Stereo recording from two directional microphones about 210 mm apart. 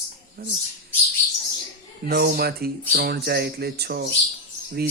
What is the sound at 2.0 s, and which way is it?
Speech, 50° right (ahead or behind).